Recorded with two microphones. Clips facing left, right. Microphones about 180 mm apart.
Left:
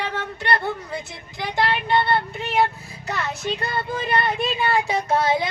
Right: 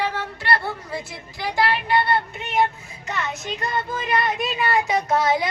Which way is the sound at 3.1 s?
35° left (ahead or behind).